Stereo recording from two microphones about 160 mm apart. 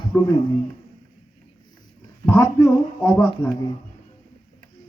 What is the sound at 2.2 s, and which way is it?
Speech, 15° left (ahead or behind).